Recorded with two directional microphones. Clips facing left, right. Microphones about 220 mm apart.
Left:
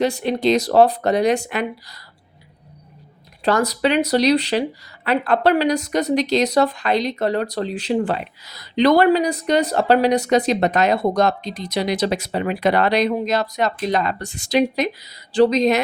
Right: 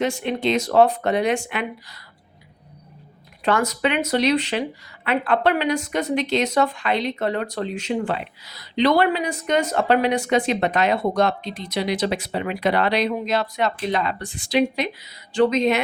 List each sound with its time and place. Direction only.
0.0 s speech: 35° left (ahead or behind)
3.4 s speech: 35° left (ahead or behind)